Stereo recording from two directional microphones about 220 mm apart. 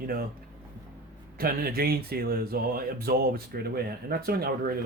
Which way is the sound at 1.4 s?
45° right (ahead or behind).